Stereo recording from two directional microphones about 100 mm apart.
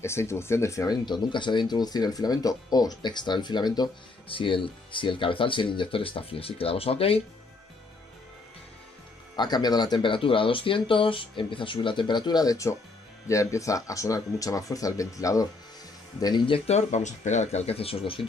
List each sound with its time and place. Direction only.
0.0 s speech: 25° left (ahead or behind)
1.0 s speech: 50° left (ahead or behind)
4.3 s speech: 60° left (ahead or behind); by 7.2 s 75° left (ahead or behind)
9.4 s speech: 45° left (ahead or behind)
16.4 s speech: 80° left
17.5 s speech: 90° left; by 18.2 s 65° left (ahead or behind)